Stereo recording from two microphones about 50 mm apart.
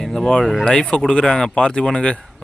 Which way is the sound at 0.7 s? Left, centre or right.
Centre.